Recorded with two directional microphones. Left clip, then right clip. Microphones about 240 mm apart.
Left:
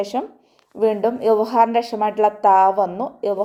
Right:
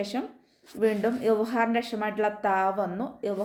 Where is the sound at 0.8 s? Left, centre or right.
Left.